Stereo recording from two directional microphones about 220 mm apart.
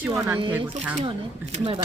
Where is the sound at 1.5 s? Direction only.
25° right (ahead or behind).